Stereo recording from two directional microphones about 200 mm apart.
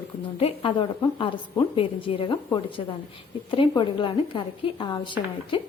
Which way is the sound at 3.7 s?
25° left (ahead or behind).